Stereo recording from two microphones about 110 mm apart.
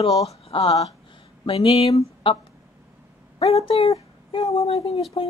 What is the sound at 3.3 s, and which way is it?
Speech, 65° left (ahead or behind).